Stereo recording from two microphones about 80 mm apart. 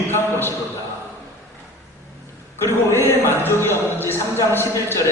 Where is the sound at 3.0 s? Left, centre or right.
Left.